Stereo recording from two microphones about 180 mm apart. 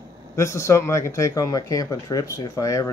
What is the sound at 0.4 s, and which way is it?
Speech, 15° left (ahead or behind).